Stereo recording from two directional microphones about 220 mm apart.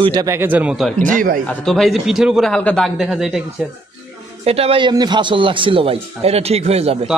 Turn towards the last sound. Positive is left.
turn(degrees=-30)  # may be behind; listen again after turning